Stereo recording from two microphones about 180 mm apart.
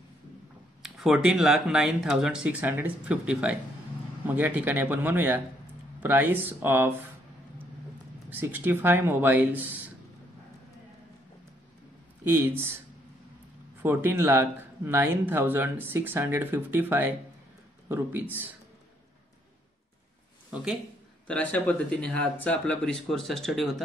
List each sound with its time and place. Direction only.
0.8 s speech: centre (ahead or behind)
8.3 s speech: 10° right (ahead or behind)
12.3 s speech: 10° right (ahead or behind)
13.8 s speech: 10° right (ahead or behind)
21.3 s speech: 5° left (ahead or behind)